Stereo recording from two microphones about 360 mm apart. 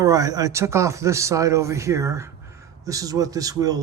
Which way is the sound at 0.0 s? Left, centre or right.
Centre.